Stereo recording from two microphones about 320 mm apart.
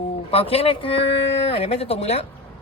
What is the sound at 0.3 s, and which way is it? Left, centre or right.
Speech, centre.